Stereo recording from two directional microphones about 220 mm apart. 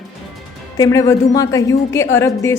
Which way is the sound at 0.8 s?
15° left (ahead or behind).